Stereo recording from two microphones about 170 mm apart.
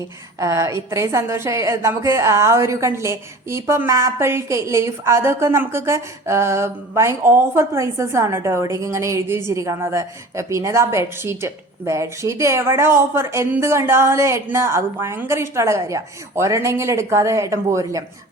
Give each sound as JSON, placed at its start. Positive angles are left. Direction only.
{"t": 0.3, "sound": "a woman's voice", "side_deg": -20}